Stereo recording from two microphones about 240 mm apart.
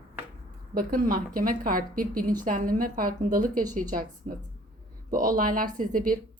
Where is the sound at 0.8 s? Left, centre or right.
Right.